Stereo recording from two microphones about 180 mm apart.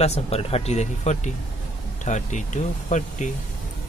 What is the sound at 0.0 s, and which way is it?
Speech, 35° left (ahead or behind).